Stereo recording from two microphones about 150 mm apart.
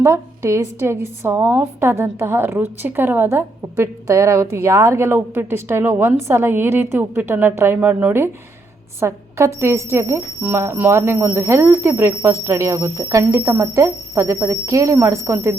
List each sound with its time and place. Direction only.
0.0 s a woman's voice: 15° right (ahead or behind)